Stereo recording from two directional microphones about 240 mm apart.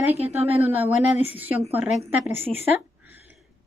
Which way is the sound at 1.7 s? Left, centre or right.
Centre.